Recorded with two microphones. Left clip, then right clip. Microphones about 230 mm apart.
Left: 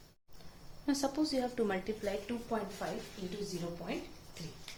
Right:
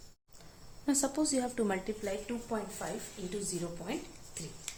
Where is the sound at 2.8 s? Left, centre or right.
Right.